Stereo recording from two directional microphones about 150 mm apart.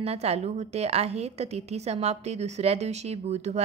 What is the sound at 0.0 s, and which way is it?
A woman's voice, 45° right (ahead or behind).